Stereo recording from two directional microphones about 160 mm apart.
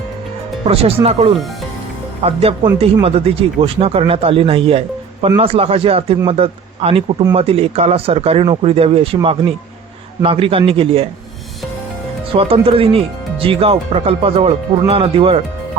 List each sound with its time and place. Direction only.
0.6 s speech: 40° right (ahead or behind)
12.3 s speech: 35° right (ahead or behind)